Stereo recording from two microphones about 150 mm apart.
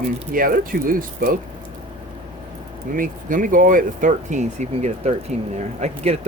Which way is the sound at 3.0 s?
60° right (ahead or behind).